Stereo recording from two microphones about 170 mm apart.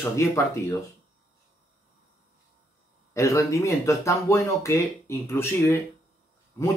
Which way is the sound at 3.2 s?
20° left (ahead or behind).